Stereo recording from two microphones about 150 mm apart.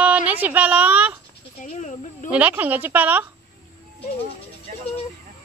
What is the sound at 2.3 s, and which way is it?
Speech, 10° right (ahead or behind).